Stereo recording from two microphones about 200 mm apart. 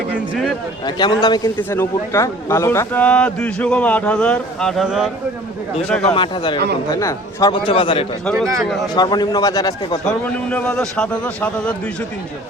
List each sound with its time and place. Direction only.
0.9 s a man's voice: 20° left (ahead or behind); by 6.1 s 5° left (ahead or behind)
6.1 s speech: 25° left (ahead or behind)
8.2 s a man's voice: 5° left (ahead or behind)
9.0 s speech: 20° left (ahead or behind)
10.5 s a man's voice: 5° left (ahead or behind)